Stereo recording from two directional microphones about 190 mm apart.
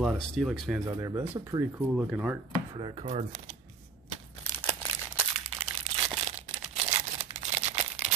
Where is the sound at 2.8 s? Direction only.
25° right (ahead or behind).